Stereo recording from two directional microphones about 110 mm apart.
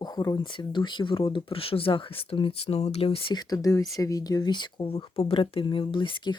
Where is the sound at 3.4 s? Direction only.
35° left (ahead or behind).